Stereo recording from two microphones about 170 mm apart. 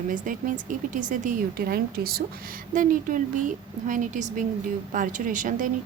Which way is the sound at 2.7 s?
50° right (ahead or behind).